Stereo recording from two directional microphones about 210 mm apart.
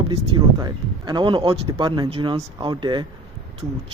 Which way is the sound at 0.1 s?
25° right (ahead or behind).